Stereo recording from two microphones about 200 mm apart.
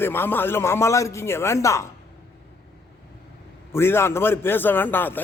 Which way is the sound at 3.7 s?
10° left (ahead or behind).